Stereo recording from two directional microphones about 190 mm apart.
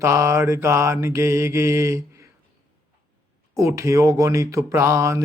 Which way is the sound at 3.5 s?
15° right (ahead or behind).